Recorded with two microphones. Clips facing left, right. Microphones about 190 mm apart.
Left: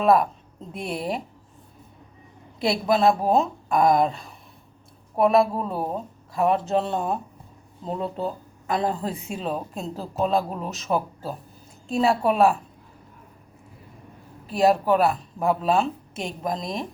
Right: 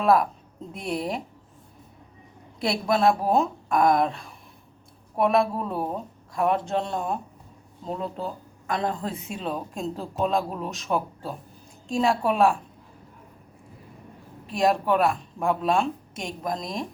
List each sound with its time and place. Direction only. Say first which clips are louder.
0.0 s speech: left 2 dB; centre (ahead or behind)
2.6 s speech: left 2 dB; centre (ahead or behind)
14.4 s speech: left 3 dB; 5° left (ahead or behind)